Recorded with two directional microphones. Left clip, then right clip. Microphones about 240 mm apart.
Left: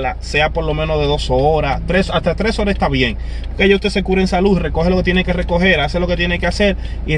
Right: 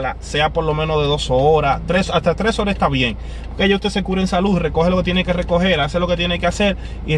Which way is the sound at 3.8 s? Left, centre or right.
Centre.